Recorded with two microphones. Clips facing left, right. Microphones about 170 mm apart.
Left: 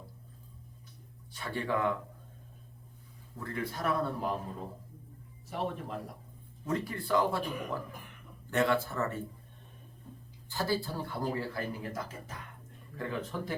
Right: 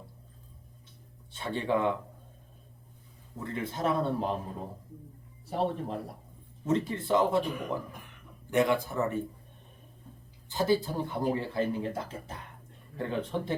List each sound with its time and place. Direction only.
1.3 s speech: 25° right (ahead or behind)
3.3 s speech: 20° right (ahead or behind)
5.5 s speech: 30° right (ahead or behind)
10.5 s speech: 20° right (ahead or behind)